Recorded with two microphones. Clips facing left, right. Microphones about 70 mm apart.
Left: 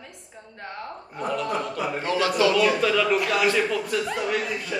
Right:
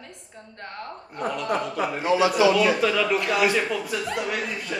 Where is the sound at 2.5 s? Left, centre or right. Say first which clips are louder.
Even; centre.